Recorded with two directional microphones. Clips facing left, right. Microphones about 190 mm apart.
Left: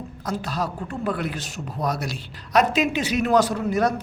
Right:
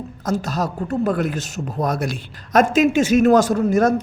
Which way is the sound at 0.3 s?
45° right (ahead or behind).